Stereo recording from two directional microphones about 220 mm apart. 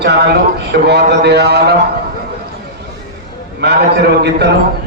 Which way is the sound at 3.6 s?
50° right (ahead or behind).